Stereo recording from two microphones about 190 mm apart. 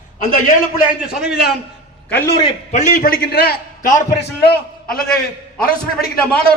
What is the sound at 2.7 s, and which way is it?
A man's voice, 40° left (ahead or behind).